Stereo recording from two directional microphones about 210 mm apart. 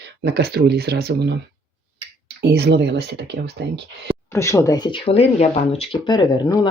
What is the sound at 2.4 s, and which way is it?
Speech, 55° right (ahead or behind).